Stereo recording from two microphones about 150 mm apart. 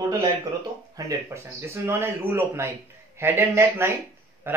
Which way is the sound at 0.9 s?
20° right (ahead or behind).